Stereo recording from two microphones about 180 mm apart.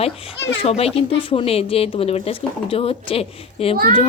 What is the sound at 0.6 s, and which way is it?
Speech, 35° left (ahead or behind).